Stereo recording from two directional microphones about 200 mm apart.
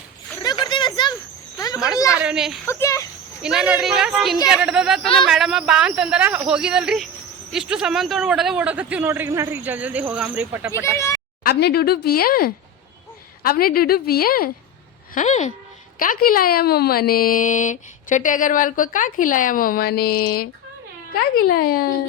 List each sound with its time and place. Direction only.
0.4 s a sound: 20° left (ahead or behind)
1.5 s insect: 15° left (ahead or behind)
2.1 s speech: 5° right (ahead or behind)
2.6 s speech: 15° left (ahead or behind)
3.4 s a man's voice: 5° right (ahead or behind)
10.9 s speech: 15° left (ahead or behind)
11.4 s speech: 50° left (ahead or behind)
15.1 s speech: 35° left (ahead or behind)